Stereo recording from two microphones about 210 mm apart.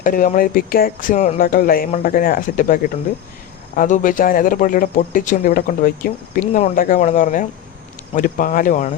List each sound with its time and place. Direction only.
0.0 s a man's voice: 40° left (ahead or behind)